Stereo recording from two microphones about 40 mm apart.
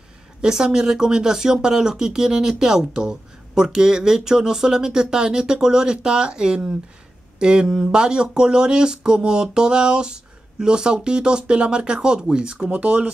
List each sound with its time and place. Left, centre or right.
0.4 s a woman's voice: centre
7.3 s a sound: right
7.8 s speech: right